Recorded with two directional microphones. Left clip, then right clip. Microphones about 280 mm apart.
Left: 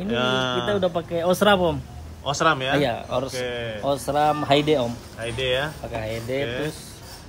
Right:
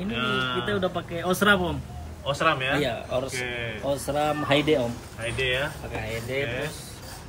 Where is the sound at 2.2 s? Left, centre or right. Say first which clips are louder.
Left 3 dB; centre.